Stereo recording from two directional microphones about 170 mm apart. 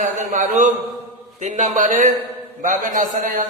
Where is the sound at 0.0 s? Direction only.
50° right (ahead or behind).